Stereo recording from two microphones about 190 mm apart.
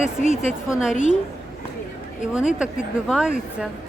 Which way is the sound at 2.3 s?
5° right (ahead or behind).